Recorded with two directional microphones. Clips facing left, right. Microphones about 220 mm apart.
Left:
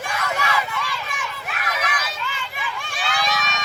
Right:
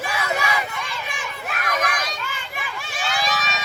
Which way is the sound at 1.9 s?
5° left (ahead or behind).